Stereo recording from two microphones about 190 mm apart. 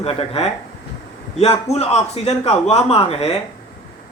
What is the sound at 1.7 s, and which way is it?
Speech, 35° left (ahead or behind).